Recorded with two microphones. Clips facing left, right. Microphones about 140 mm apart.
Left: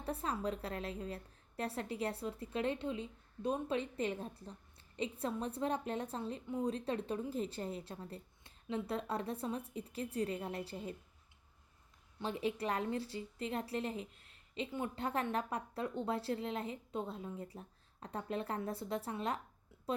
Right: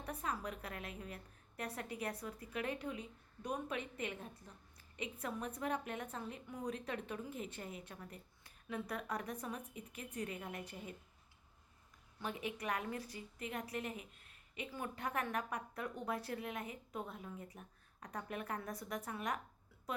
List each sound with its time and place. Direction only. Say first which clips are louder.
0.0 s a woman's voice: left 4 dB; 30° left (ahead or behind)
12.2 s a woman's voice: left 5 dB; 30° left (ahead or behind)